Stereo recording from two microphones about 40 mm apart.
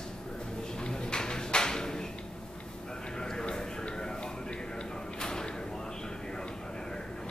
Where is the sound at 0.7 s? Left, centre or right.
Left.